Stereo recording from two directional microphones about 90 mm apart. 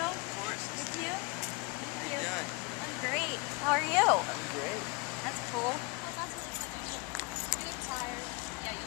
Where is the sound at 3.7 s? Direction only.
Centre (ahead or behind).